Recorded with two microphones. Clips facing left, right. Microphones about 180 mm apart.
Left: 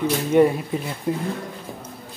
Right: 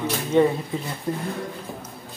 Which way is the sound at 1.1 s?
10° left (ahead or behind).